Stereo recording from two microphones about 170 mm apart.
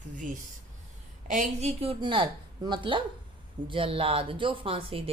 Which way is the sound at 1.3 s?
45° right (ahead or behind).